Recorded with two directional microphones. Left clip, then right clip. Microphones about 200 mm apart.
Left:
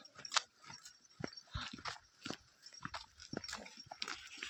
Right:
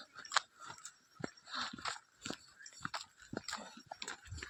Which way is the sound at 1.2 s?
30° right (ahead or behind).